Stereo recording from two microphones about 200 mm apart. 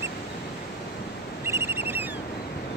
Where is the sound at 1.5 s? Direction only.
10° right (ahead or behind).